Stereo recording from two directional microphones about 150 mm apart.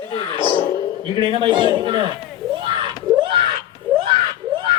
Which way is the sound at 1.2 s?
35° right (ahead or behind).